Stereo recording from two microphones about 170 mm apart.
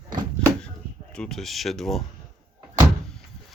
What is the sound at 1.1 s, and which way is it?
Speech, 5° left (ahead or behind).